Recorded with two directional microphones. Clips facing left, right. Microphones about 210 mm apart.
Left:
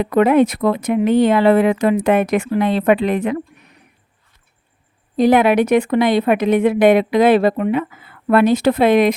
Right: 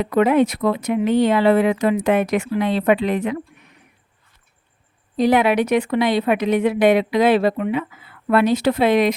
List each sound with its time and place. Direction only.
0.0 s speech: 55° left (ahead or behind)
5.1 s speech: 50° left (ahead or behind)